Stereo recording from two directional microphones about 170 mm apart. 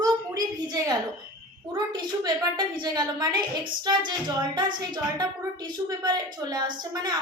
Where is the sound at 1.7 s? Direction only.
25° right (ahead or behind).